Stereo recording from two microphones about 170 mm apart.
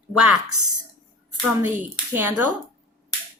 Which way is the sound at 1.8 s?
10° right (ahead or behind).